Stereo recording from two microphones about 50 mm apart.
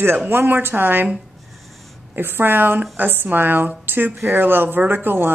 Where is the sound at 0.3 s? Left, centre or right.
Right.